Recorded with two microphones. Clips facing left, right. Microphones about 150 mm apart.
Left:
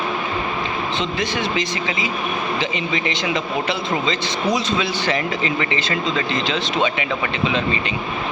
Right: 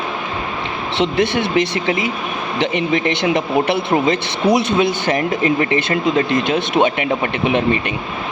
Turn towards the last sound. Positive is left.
turn(degrees=-55)  # may be behind; listen again after turning